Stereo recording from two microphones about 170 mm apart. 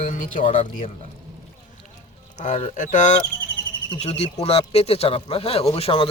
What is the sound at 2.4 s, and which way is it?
Speech, 40° left (ahead or behind).